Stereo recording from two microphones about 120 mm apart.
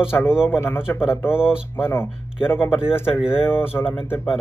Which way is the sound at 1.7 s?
20° left (ahead or behind).